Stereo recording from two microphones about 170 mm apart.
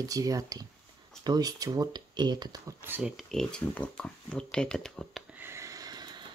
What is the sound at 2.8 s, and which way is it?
Speech, 10° right (ahead or behind).